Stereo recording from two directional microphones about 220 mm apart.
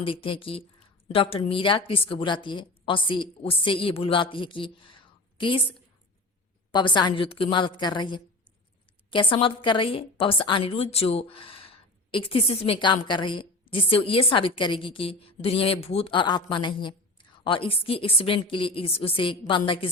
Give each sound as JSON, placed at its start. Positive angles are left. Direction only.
{"t": 0.0, "sound": "a woman's voice", "side_deg": 25}